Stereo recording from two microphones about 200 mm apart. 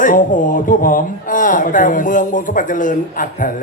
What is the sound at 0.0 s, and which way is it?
Speech, 40° left (ahead or behind).